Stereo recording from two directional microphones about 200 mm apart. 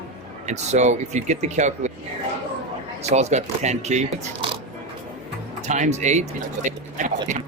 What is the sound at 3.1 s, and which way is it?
Speech, 35° right (ahead or behind).